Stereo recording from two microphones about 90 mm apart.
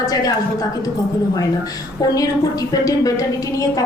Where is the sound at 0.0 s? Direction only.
40° left (ahead or behind).